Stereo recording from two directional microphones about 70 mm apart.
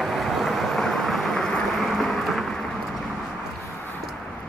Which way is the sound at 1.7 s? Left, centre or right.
Centre.